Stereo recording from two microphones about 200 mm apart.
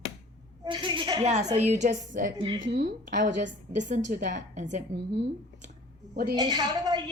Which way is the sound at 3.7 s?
35° right (ahead or behind).